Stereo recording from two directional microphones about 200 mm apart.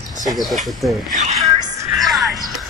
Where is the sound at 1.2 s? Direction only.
35° right (ahead or behind).